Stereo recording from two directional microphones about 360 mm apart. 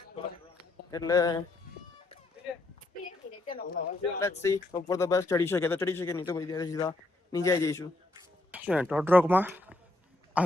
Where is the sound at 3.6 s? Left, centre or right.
Left.